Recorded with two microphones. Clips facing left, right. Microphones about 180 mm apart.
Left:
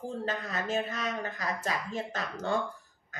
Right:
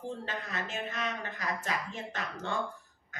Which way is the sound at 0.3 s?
40° left (ahead or behind).